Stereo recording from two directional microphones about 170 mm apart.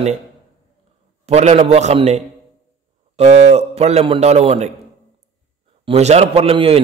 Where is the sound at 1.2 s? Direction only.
40° right (ahead or behind).